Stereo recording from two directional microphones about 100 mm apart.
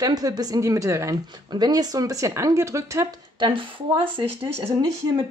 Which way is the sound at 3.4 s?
55° right (ahead or behind).